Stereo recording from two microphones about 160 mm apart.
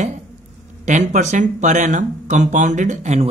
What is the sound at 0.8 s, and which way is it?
Speech, 50° right (ahead or behind).